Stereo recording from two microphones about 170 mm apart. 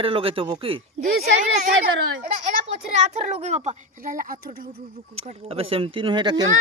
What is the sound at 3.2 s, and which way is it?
A woman's voice, 40° right (ahead or behind).